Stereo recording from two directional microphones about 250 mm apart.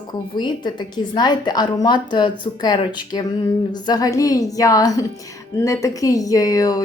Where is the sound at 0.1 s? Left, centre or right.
Centre.